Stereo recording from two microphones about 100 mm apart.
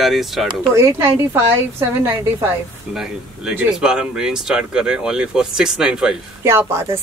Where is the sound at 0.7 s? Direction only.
30° right (ahead or behind).